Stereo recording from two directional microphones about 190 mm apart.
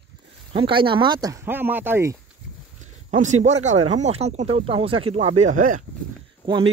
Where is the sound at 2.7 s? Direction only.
40° right (ahead or behind).